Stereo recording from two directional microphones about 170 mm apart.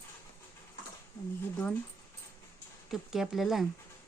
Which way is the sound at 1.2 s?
15° left (ahead or behind).